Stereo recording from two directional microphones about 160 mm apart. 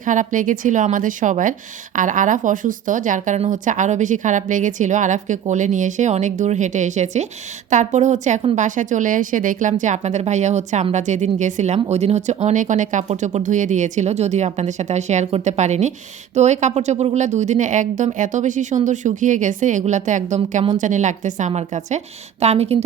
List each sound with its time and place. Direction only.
0.0 s speech: 55° right (ahead or behind)